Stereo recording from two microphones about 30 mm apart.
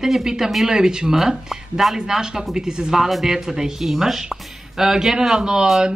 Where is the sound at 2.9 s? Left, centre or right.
Centre.